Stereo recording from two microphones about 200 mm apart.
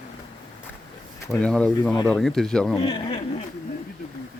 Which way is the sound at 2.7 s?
25° left (ahead or behind).